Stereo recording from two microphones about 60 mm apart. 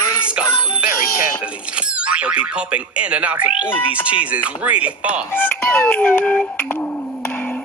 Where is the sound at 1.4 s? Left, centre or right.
Centre.